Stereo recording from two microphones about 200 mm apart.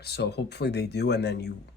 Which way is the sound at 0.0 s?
55° left (ahead or behind).